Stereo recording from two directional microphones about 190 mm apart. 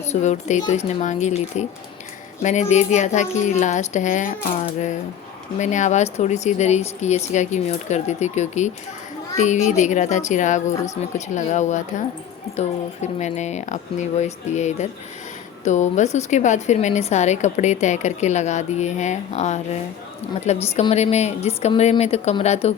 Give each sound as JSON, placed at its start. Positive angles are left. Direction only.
{"t": 0.1, "sound": "a woman's voice", "side_deg": 35}
{"t": 5.5, "sound": "a woman's voice", "side_deg": 40}